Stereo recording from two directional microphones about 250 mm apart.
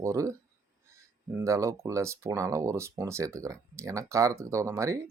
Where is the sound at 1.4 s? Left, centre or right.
Centre.